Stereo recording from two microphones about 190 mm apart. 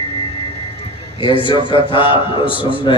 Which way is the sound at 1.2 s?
25° left (ahead or behind).